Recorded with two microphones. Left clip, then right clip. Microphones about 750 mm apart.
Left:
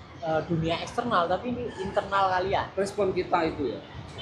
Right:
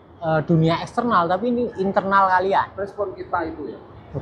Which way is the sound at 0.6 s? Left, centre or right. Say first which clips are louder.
Right 7 dB; right.